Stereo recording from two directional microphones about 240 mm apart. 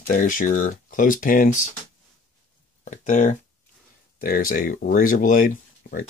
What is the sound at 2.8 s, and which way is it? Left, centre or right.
Speech, left.